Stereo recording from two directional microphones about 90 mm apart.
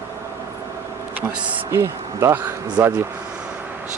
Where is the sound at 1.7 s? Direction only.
30° right (ahead or behind).